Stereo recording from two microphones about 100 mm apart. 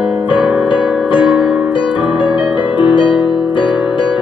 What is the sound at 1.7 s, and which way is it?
Music, 55° left (ahead or behind).